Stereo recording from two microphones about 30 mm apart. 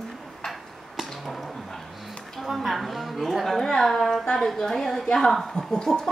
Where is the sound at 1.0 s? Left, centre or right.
Centre.